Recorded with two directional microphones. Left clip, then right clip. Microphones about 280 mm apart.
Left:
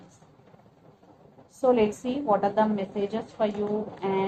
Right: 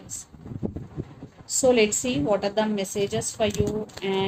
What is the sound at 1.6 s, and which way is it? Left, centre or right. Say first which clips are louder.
A woman's voice: right 3 dB; right.